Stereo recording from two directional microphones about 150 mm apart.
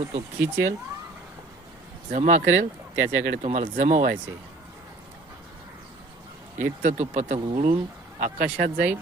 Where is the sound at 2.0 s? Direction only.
55° right (ahead or behind).